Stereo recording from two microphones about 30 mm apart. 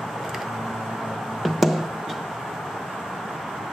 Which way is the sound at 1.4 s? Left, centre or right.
Centre.